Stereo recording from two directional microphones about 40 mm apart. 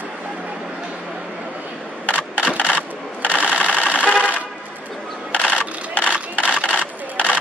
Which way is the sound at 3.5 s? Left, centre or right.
Left.